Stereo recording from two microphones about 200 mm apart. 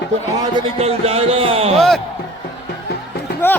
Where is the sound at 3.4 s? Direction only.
10° left (ahead or behind).